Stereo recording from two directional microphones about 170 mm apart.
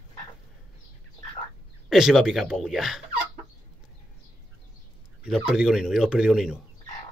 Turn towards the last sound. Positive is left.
turn(degrees=-5)  # may be behind; listen again after turning